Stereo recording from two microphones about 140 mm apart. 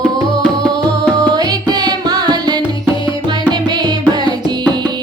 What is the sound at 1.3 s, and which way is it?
Music, 30° right (ahead or behind).